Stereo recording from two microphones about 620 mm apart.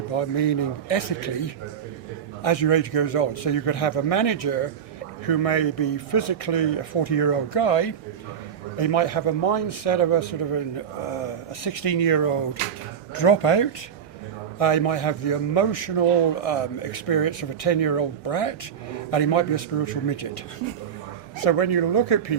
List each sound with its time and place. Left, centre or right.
0.1 s a man's voice: left
2.4 s a man's voice: left
21.4 s speech: left